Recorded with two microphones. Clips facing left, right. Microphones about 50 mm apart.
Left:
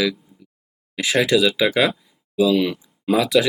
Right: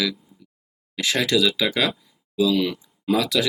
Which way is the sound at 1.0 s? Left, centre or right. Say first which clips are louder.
Left 3 dB; centre.